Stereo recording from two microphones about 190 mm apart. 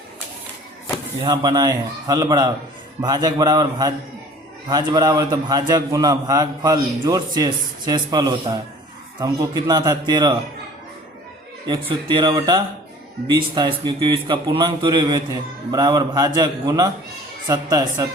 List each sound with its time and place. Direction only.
1.2 s a man's voice: 20° right (ahead or behind)
11.9 s a man's voice: 25° right (ahead or behind)